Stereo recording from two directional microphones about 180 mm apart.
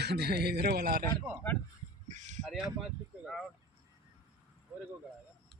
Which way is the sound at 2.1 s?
40° right (ahead or behind).